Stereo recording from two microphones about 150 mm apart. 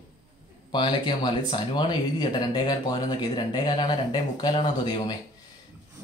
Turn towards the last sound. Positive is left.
turn(degrees=25)  # may be behind; listen again after turning